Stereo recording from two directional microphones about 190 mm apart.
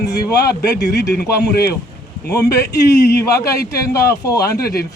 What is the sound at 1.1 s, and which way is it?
Speech, 55° left (ahead or behind).